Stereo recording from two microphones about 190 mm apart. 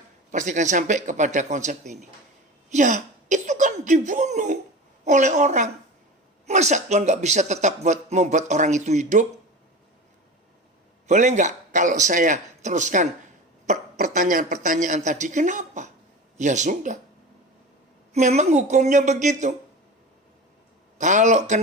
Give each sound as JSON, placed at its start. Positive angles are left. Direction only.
{"t": 0.3, "sound": "a man's voice", "side_deg": -40}
{"t": 11.0, "sound": "a man's voice", "side_deg": -40}
{"t": 18.1, "sound": "a man's voice", "side_deg": -35}
{"t": 21.0, "sound": "a man's voice", "side_deg": -40}